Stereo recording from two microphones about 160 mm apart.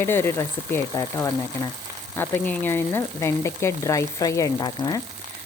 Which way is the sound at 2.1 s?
15° left (ahead or behind).